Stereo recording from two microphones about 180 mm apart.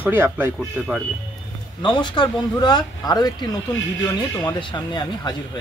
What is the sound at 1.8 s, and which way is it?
Speech, 25° left (ahead or behind).